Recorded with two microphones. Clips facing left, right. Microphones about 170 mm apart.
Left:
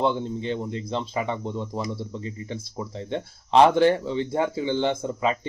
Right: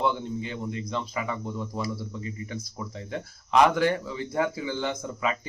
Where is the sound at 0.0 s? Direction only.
30° left (ahead or behind).